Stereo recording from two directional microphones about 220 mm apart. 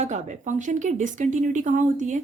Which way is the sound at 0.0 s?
35° right (ahead or behind).